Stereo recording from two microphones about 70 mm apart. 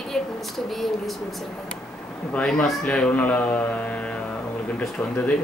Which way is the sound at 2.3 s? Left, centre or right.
Centre.